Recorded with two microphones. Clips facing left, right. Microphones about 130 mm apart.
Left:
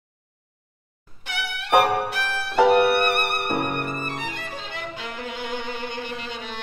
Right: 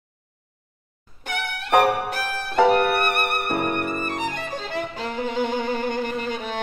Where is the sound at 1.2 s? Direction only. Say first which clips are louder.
Right 2 dB; 45° right (ahead or behind).